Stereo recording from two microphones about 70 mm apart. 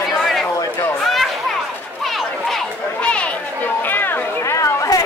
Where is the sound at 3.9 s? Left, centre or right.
Left.